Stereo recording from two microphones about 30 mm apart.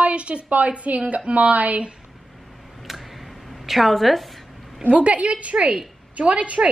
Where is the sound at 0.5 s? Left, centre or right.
Right.